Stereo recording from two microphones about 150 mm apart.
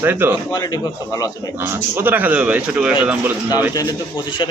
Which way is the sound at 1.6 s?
15° right (ahead or behind).